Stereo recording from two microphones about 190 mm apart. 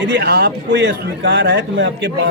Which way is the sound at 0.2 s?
60° right (ahead or behind).